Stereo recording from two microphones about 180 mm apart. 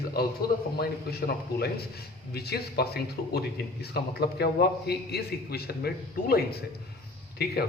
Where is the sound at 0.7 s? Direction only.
60° left (ahead or behind).